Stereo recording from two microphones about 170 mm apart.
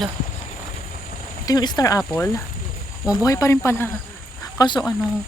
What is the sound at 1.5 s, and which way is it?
Speech, 25° left (ahead or behind).